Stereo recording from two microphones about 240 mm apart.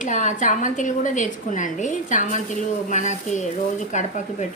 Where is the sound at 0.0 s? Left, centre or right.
Left.